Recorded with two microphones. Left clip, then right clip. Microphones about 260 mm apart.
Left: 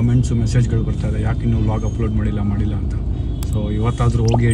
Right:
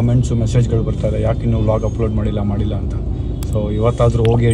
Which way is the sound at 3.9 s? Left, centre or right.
Centre.